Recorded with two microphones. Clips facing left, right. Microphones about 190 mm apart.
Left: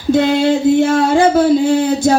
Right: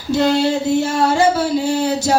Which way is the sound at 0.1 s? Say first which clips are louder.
Left 3 dB; 55° left (ahead or behind).